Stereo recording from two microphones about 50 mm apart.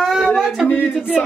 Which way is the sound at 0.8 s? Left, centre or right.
Right.